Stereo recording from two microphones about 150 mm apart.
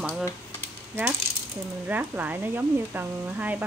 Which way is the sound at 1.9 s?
10° right (ahead or behind).